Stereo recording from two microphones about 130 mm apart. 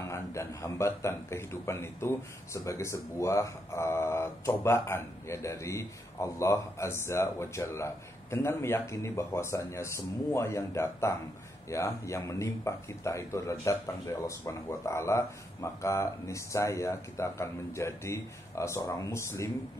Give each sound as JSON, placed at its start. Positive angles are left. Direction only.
{"t": 0.1, "sound": "speech", "side_deg": 25}